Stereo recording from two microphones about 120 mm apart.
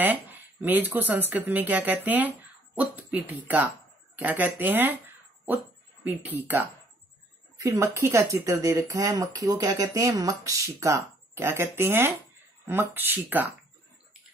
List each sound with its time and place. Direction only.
0.0 s speech: 15° right (ahead or behind)
7.5 s speech: 30° right (ahead or behind)